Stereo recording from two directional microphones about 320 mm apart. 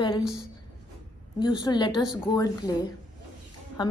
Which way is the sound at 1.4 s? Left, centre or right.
Centre.